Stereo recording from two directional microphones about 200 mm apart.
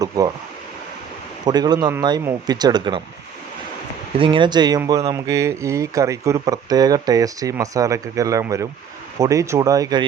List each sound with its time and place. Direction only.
1.5 s speech: 20° right (ahead or behind)
4.2 s speech: 25° right (ahead or behind)